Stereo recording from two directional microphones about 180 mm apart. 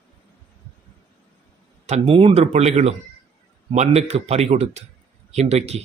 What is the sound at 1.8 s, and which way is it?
A man's voice, 35° right (ahead or behind).